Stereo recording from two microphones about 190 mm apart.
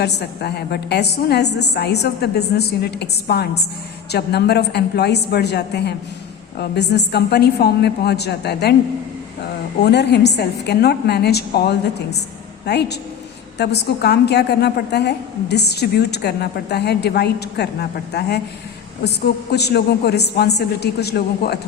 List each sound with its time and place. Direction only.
0.0 s a woman's voice: 60° left (ahead or behind)
9.8 s a woman's voice: 60° left (ahead or behind)